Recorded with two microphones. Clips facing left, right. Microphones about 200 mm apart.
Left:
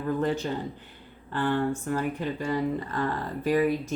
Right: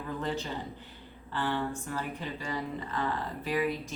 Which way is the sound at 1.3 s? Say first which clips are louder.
Left 6 dB; 55° left (ahead or behind).